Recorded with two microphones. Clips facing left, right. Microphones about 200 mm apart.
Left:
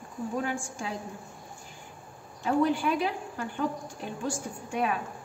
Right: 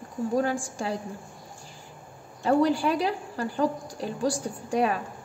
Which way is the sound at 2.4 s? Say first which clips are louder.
Right 3 dB; 35° right (ahead or behind).